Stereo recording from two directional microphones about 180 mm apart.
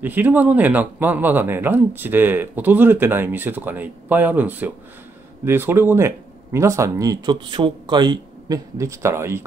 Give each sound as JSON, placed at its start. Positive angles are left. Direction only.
{"t": 0.0, "sound": "speech", "side_deg": -10}